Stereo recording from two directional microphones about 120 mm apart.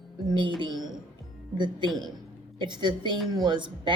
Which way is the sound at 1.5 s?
40° right (ahead or behind).